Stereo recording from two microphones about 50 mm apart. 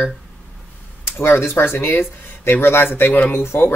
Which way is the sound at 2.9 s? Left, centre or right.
Left.